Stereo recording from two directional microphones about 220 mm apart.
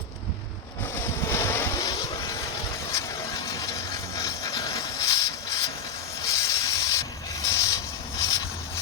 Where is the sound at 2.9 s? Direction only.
15° left (ahead or behind).